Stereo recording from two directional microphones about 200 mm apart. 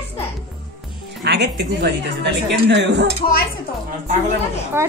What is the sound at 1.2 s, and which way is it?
A woman's voice, 55° right (ahead or behind).